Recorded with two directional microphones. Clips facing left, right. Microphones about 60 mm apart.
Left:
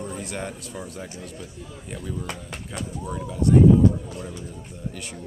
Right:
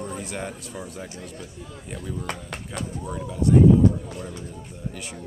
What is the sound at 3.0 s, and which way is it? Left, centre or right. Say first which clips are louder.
Speech: left 1 dB; centre.